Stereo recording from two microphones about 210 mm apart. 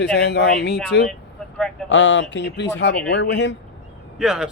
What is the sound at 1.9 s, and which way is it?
Speech, 60° left (ahead or behind).